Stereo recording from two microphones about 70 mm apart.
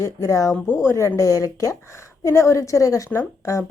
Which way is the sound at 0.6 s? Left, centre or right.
Left.